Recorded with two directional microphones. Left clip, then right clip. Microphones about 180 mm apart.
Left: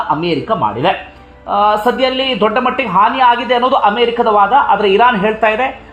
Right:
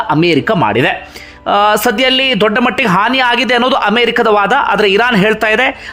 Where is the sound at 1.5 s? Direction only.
30° right (ahead or behind).